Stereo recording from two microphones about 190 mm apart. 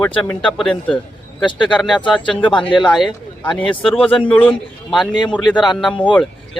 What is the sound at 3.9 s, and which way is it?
Speech, 30° left (ahead or behind).